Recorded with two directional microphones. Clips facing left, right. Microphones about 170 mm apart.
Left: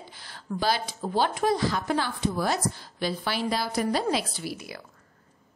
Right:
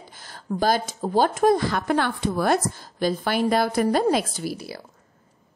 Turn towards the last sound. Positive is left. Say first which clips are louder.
# right 5 dB
turn(degrees=-35)  # may be behind; listen again after turning